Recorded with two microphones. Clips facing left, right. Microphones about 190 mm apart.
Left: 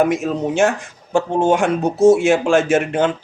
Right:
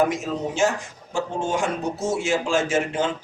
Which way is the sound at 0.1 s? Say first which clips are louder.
Left 7 dB; 60° left (ahead or behind).